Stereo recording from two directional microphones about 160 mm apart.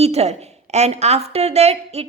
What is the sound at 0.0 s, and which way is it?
A woman's voice, 40° right (ahead or behind).